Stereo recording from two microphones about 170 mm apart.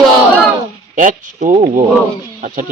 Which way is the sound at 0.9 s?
50° right (ahead or behind).